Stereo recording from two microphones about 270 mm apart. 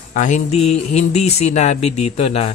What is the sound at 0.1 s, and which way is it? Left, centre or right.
Speech, left.